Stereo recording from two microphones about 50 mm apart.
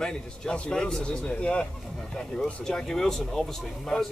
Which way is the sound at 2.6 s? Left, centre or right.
Centre.